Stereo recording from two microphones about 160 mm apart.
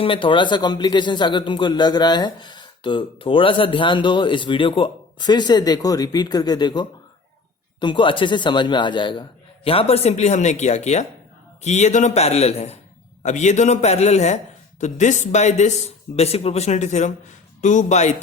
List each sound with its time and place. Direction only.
0.0 s a man's voice: 30° left (ahead or behind)